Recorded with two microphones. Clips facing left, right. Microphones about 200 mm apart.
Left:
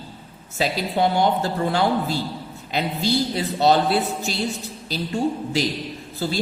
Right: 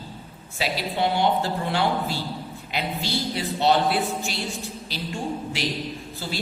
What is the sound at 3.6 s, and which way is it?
Speech, 40° left (ahead or behind).